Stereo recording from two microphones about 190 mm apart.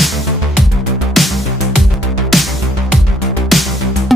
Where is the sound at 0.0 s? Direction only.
Centre (ahead or behind).